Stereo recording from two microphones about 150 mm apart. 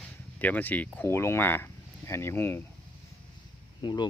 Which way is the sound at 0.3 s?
10° left (ahead or behind).